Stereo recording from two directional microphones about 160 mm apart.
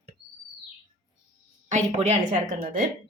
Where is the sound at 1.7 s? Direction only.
45° right (ahead or behind).